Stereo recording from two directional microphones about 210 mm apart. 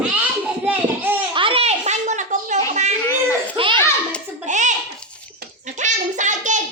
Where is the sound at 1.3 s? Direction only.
25° right (ahead or behind).